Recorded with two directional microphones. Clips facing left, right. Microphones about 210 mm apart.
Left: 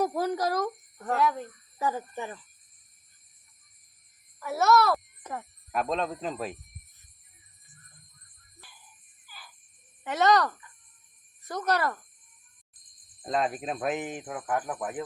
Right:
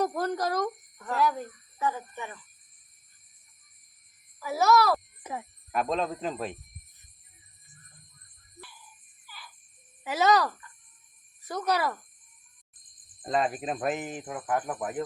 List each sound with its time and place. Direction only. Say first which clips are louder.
0.0 s a sound: left 1 dB; 5° left (ahead or behind)
1.1 s speech: left 1 dB; centre (ahead or behind)
1.8 s speech: left 1 dB; 35° left (ahead or behind)
4.4 s speech: even; centre (ahead or behind)
10.0 s speech: even; 5° right (ahead or behind)
13.2 s speech: right 1 dB; centre (ahead or behind)